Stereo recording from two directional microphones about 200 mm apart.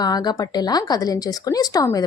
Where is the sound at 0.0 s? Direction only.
20° left (ahead or behind).